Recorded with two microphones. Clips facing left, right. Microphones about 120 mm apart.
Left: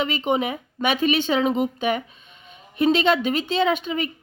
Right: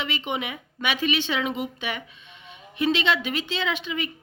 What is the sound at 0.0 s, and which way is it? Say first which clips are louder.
Speech: left 7 dB; 40° left (ahead or behind).